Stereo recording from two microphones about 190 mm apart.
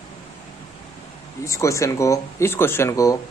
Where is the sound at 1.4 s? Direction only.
15° left (ahead or behind).